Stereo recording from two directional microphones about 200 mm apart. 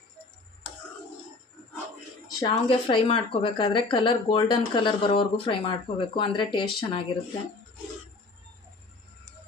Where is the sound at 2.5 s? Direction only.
25° left (ahead or behind).